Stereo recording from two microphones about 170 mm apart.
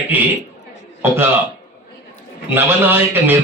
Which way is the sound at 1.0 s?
15° right (ahead or behind).